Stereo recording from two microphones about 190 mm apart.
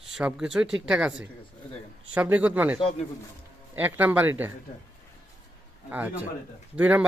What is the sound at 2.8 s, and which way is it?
Speech, 30° left (ahead or behind).